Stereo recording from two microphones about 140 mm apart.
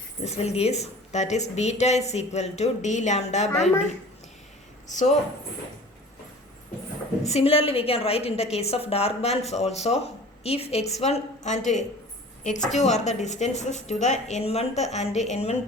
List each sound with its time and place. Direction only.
0.3 s a woman's voice: 50° left (ahead or behind)
4.9 s speech: 65° left (ahead or behind)
7.3 s a woman's voice: 45° left (ahead or behind)